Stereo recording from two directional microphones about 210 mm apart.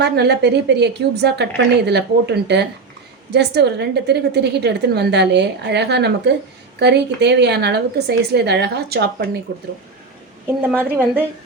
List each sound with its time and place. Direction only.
0.0 s a woman's voice: 50° right (ahead or behind)
10.4 s a woman's voice: 10° right (ahead or behind)